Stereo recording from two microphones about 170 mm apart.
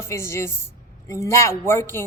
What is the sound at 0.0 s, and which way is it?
Speech, 15° left (ahead or behind).